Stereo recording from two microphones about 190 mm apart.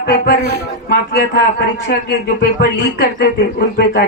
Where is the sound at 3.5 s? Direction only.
55° left (ahead or behind).